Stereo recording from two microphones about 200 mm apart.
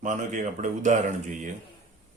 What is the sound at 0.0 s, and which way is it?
Speech, 40° right (ahead or behind).